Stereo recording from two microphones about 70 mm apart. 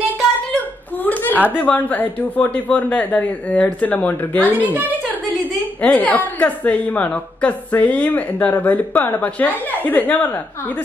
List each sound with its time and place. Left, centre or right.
0.9 s chuckle: left
1.6 s a woman's voice: left
4.4 s a woman's voice: right
5.8 s a woman's voice: left